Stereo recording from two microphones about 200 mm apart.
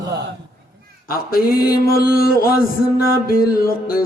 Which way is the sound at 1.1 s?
50° left (ahead or behind).